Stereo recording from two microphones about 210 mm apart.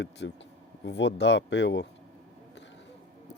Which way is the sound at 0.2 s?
55° left (ahead or behind).